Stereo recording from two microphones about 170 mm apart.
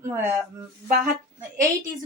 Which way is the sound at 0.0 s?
15° right (ahead or behind).